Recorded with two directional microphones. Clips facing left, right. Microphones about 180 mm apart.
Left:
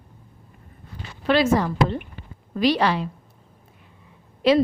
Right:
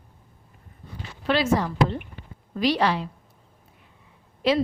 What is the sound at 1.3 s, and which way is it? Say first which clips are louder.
Speech: left 3 dB; 55° left (ahead or behind).